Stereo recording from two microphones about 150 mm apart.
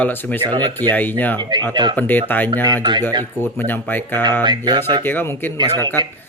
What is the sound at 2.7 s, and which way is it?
Speech, 30° right (ahead or behind).